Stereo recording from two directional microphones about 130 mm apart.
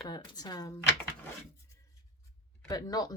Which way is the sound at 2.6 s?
30° left (ahead or behind).